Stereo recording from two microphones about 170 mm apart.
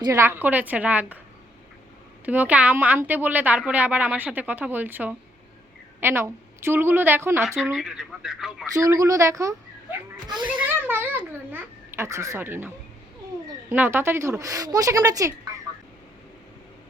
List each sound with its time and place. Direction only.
0.0 s a woman's voice: 15° right (ahead or behind)
2.2 s a woman's voice: 10° right (ahead or behind)
7.8 s speech: 5° right (ahead or behind)
8.7 s a woman's voice: 20° right (ahead or behind)